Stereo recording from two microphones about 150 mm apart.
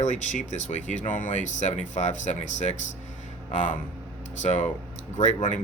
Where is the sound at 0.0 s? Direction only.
50° left (ahead or behind).